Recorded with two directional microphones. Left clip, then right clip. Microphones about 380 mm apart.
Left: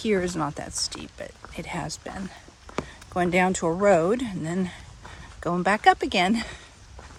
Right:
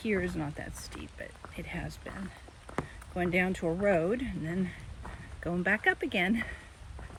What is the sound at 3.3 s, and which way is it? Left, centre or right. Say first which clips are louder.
Speech: left 7 dB; centre.